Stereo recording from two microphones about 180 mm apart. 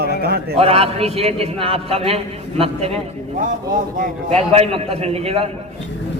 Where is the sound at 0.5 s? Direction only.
35° right (ahead or behind).